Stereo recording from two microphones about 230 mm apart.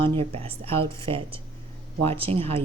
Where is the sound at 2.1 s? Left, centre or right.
Right.